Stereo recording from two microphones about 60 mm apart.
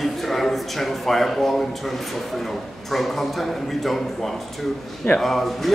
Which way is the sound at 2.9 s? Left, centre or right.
Centre.